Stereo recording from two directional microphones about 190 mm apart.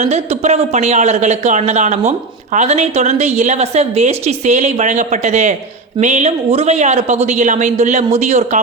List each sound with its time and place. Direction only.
0.0 s speech: 35° right (ahead or behind)